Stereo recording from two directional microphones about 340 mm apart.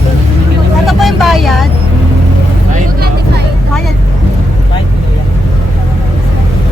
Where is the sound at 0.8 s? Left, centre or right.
Centre.